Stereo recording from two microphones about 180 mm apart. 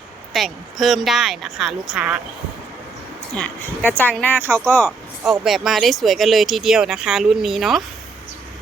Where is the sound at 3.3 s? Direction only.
10° left (ahead or behind).